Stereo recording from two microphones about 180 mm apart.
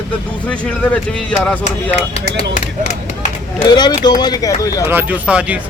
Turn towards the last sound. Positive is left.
turn(degrees=-5)  # may be behind; listen again after turning